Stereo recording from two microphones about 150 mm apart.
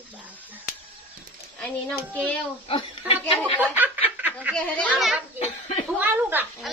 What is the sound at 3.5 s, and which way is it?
Speech, 10° right (ahead or behind).